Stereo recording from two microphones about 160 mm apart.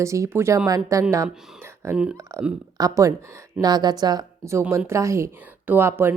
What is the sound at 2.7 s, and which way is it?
Speech, 20° right (ahead or behind).